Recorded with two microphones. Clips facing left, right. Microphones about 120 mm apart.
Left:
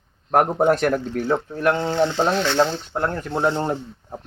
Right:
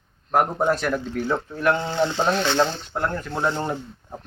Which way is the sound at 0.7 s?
55° left (ahead or behind).